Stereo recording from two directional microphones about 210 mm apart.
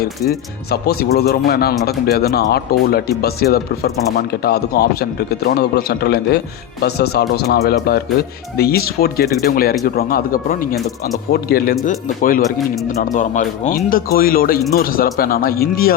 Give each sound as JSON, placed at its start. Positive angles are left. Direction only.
{"t": 0.7, "sound": "speech", "side_deg": 50}